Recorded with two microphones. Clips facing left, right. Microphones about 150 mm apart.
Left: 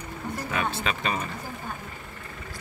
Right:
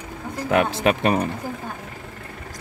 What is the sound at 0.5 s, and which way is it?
Speech, 65° right (ahead or behind).